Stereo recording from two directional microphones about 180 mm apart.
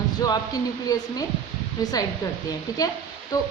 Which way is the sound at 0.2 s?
20° left (ahead or behind).